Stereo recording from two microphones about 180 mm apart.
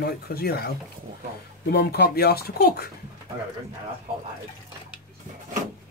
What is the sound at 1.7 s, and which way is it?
Speech, 65° left (ahead or behind).